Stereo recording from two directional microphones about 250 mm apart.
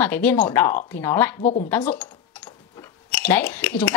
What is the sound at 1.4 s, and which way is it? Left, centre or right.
Speech, left.